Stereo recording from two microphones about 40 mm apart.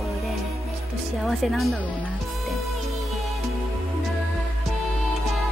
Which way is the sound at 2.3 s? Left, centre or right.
Centre.